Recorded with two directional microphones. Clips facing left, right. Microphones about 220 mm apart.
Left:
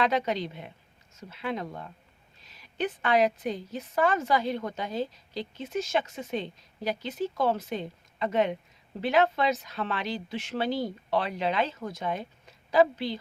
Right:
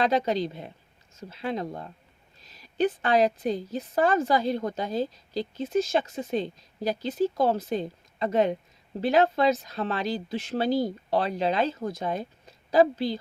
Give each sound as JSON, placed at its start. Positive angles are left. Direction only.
{"t": 0.0, "sound": "a woman's voice", "side_deg": -35}